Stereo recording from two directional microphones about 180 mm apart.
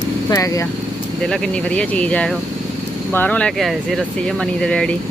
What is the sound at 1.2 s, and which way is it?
Speech, 5° left (ahead or behind).